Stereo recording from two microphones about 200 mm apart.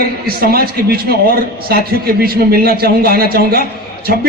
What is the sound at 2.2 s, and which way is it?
A man's voice, 50° right (ahead or behind).